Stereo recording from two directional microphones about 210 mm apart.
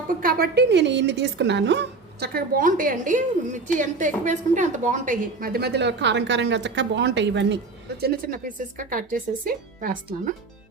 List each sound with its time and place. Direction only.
0.2 s a woman's voice: 45° right (ahead or behind)
8.0 s speech: 45° right (ahead or behind)